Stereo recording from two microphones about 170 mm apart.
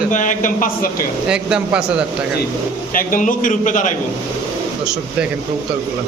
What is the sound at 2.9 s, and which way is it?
A man's voice, 55° left (ahead or behind).